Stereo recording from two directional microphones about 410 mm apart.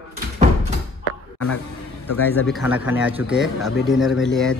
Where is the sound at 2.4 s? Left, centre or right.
Centre.